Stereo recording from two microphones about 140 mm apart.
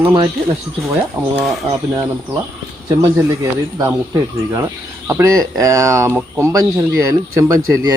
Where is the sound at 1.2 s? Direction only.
10° right (ahead or behind).